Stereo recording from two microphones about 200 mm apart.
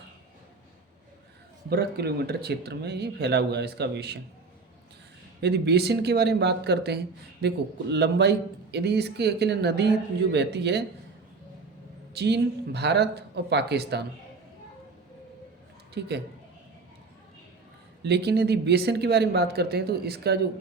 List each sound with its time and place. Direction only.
1.7 s speech: 55° right (ahead or behind)
5.4 s speech: 55° right (ahead or behind)
12.1 s speech: 55° right (ahead or behind)
18.0 s speech: 55° right (ahead or behind)